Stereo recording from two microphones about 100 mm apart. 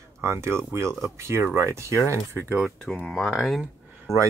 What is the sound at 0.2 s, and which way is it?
Speech, 25° right (ahead or behind).